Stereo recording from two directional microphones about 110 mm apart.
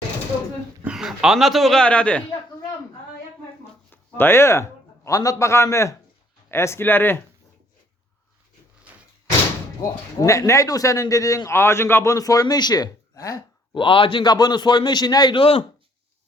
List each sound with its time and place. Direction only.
0.9 s a man's voice: 5° right (ahead or behind); by 2.2 s 10° left (ahead or behind)
3.9 s a man's voice: 20° left (ahead or behind)
9.8 s a man's voice: 30° left (ahead or behind)
13.7 s a man's voice: 50° left (ahead or behind)
15.4 s speech: 55° left (ahead or behind)